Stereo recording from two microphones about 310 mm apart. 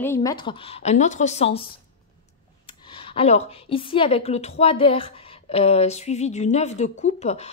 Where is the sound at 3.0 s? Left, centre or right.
Centre.